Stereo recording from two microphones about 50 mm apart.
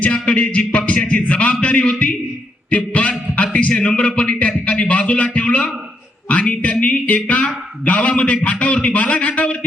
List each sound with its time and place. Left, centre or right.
0.0 s a man's voice: left